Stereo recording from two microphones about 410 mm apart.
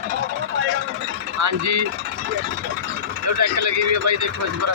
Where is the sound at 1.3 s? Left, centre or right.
Right.